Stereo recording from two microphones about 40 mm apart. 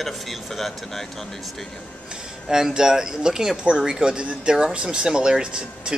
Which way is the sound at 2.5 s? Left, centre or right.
Centre.